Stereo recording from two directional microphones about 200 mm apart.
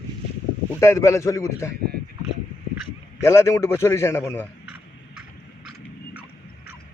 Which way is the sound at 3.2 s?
15° left (ahead or behind).